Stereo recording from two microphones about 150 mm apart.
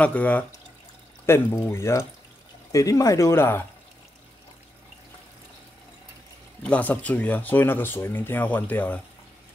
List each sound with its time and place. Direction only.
0.0 s speech: 10° left (ahead or behind)
6.6 s speech: 10° left (ahead or behind)